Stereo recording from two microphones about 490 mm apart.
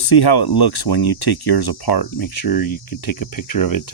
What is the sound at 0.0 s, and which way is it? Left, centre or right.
Speech, left.